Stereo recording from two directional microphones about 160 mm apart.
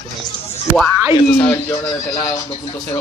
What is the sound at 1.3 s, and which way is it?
Speech, 15° left (ahead or behind).